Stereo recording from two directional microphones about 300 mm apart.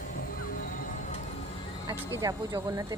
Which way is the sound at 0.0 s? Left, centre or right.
Left.